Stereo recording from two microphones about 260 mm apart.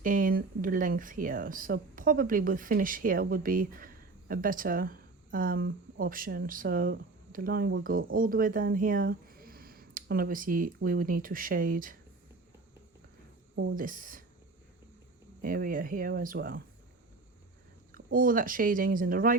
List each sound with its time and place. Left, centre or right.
0.0 s speech: right
13.7 s speech: right
15.4 s speech: right
17.9 s speech: right